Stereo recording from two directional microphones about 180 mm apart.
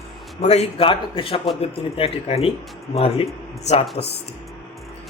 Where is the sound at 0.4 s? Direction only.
35° left (ahead or behind).